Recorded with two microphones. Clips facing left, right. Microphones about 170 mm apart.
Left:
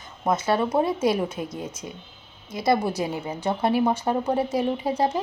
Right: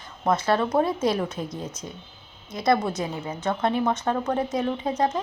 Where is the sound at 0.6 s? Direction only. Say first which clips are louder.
Even; 15° left (ahead or behind).